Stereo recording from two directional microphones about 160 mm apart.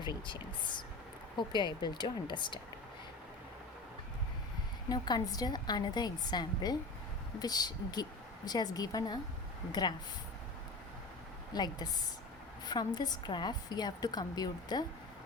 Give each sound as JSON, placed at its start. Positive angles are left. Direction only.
{"t": 0.0, "sound": "a woman's voice", "side_deg": 30}
{"t": 4.9, "sound": "a woman's voice", "side_deg": 25}
{"t": 11.5, "sound": "a woman's voice", "side_deg": 25}